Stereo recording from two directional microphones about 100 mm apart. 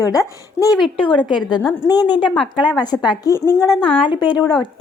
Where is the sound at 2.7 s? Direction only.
10° right (ahead or behind).